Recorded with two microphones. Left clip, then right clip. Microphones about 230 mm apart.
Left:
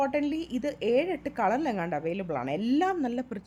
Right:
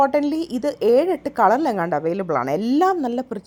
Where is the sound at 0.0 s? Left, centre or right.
Centre.